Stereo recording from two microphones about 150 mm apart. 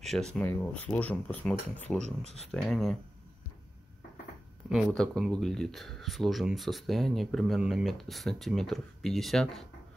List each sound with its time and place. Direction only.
0.0 s speech: centre (ahead or behind)
0.4 s speech: 10° left (ahead or behind)
2.2 s speech: 45° left (ahead or behind)
2.5 s speech: centre (ahead or behind)
4.6 s speech: centre (ahead or behind)